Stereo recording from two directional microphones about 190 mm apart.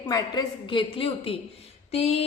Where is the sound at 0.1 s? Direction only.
25° left (ahead or behind).